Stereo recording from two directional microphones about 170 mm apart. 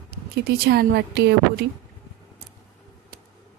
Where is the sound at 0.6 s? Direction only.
70° right (ahead or behind).